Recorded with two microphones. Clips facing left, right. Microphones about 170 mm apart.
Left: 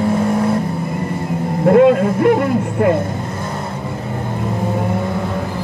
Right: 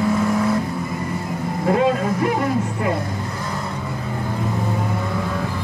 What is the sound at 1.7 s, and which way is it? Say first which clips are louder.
Speech: left 8 dB; 55° left (ahead or behind).